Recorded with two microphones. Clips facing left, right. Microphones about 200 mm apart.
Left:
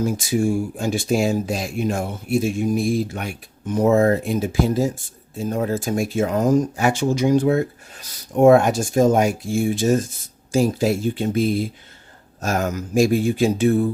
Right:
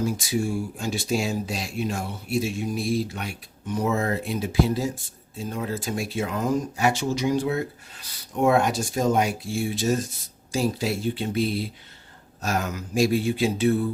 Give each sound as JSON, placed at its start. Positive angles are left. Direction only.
{"t": 0.0, "sound": "speech", "side_deg": 50}